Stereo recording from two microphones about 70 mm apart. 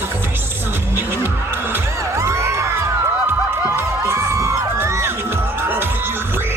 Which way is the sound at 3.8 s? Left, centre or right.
Right.